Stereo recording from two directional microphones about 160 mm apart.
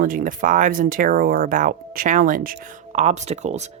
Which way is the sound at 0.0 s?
60° right (ahead or behind).